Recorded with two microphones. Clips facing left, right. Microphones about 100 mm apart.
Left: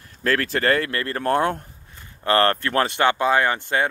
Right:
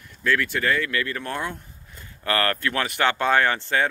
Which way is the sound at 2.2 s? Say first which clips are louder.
Left 5 dB; 30° left (ahead or behind).